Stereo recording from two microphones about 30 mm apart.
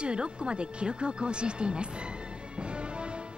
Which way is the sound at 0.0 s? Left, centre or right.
Right.